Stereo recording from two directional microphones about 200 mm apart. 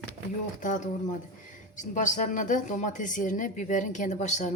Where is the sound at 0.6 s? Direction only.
40° left (ahead or behind).